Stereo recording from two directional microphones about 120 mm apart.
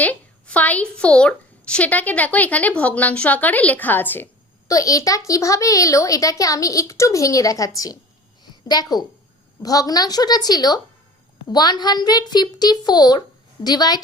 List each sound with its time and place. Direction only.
0.0 s a woman's voice: 10° left (ahead or behind)
4.7 s a child's voice: 30° left (ahead or behind)